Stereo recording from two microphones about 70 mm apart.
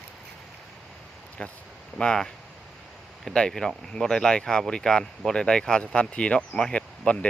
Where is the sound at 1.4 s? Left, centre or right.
Centre.